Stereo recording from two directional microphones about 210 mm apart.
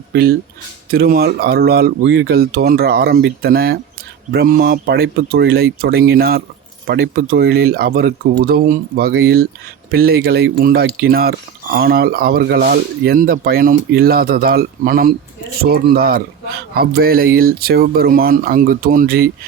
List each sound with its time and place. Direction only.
0.1 s speech: 50° right (ahead or behind)